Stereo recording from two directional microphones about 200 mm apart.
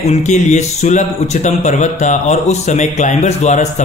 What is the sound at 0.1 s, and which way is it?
Speech, 35° left (ahead or behind).